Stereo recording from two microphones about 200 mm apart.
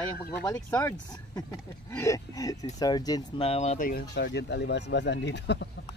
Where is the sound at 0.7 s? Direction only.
15° left (ahead or behind).